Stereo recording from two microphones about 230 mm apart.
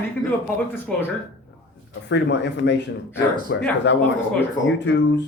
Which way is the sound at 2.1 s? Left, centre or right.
Left.